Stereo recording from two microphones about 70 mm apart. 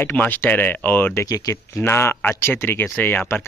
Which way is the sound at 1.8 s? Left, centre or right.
Left.